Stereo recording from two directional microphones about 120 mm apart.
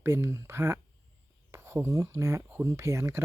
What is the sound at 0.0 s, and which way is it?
Speech, 20° right (ahead or behind).